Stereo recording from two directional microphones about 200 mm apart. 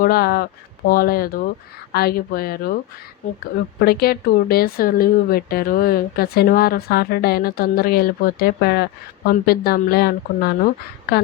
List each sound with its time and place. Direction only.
0.0 s speech: 50° left (ahead or behind)
3.8 s speech: 50° left (ahead or behind)